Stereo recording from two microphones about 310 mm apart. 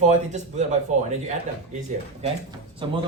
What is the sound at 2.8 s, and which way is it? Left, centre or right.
Speech, centre.